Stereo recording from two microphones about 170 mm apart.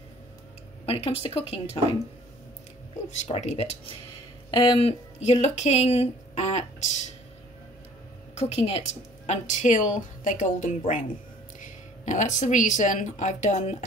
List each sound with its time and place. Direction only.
0.8 s speech: 35° left (ahead or behind)
3.1 s speech: 45° left (ahead or behind)
8.4 s speech: 40° left (ahead or behind)